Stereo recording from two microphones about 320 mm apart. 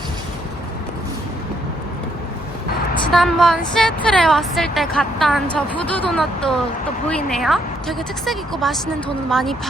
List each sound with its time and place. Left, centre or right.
3.1 s a woman's voice: centre